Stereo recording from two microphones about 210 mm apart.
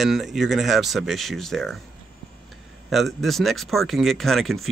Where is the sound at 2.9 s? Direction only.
Centre (ahead or behind).